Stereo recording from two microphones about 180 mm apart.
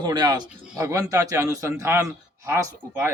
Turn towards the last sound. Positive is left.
turn(degrees=-15)  # may be behind; listen again after turning